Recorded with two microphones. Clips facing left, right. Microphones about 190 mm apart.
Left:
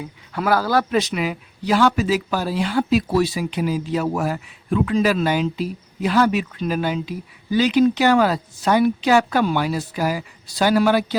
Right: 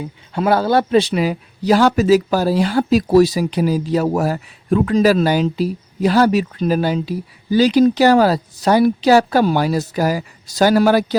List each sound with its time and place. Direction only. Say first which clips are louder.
0.0 s speech: right 5 dB; 25° right (ahead or behind)